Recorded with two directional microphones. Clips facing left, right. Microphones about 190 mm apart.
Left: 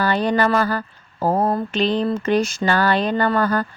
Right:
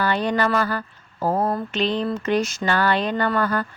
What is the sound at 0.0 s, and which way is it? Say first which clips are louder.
Speech: left 3 dB; 35° left (ahead or behind).